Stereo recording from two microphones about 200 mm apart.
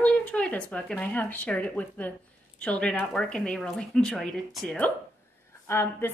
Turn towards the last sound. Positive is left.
turn(degrees=10)  # may be behind; listen again after turning